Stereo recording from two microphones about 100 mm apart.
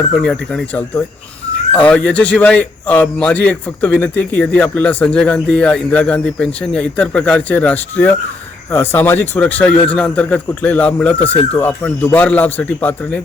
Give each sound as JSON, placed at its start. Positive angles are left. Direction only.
{"t": 0.2, "sound": "a man's voice", "side_deg": 5}
{"t": 1.7, "sound": "a man's voice", "side_deg": 15}